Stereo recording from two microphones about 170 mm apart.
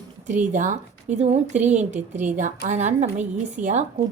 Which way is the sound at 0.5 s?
45° right (ahead or behind).